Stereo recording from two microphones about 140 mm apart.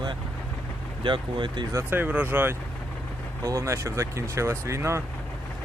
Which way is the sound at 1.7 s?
15° right (ahead or behind).